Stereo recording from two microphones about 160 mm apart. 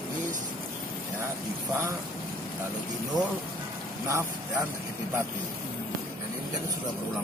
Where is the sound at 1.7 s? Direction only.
15° right (ahead or behind).